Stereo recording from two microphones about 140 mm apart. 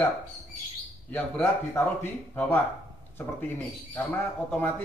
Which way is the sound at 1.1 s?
15° left (ahead or behind).